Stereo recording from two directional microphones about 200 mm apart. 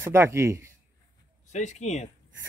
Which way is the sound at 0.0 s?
15° right (ahead or behind).